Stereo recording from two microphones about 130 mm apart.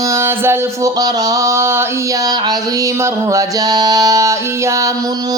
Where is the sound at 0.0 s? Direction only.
20° right (ahead or behind).